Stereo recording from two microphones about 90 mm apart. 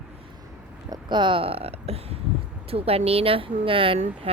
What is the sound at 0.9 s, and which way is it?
Speech, 60° right (ahead or behind).